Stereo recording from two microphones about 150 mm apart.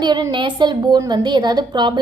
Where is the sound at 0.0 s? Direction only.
30° right (ahead or behind).